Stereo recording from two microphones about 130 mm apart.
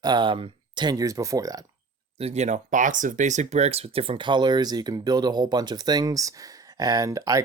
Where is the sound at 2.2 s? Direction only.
55° right (ahead or behind).